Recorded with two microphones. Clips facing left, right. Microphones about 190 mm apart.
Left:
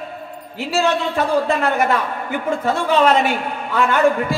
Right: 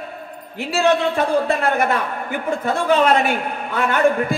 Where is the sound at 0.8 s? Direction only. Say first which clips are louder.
Right 2 dB; 50° right (ahead or behind).